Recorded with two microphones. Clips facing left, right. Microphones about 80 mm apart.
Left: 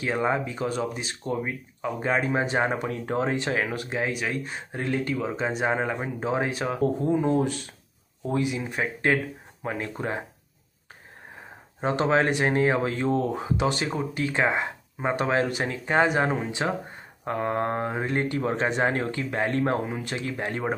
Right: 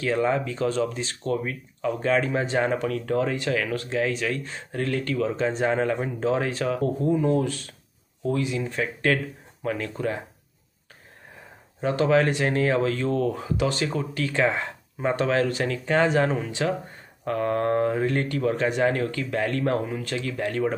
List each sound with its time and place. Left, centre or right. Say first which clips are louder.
0.0 s speech: right 2 dB; left
11.8 s speech: right 2 dB; left